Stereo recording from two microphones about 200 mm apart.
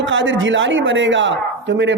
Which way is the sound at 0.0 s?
65° right (ahead or behind).